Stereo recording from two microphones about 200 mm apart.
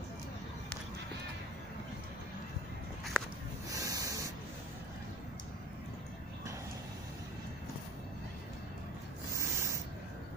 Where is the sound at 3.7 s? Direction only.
15° right (ahead or behind).